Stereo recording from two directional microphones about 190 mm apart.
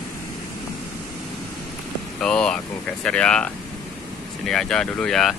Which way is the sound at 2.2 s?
5° left (ahead or behind).